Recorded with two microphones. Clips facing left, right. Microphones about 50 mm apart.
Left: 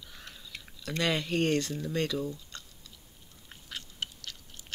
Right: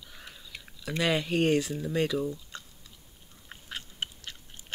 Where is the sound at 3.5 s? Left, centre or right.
Right.